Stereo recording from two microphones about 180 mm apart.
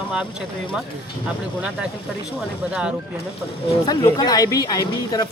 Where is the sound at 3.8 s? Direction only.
25° left (ahead or behind).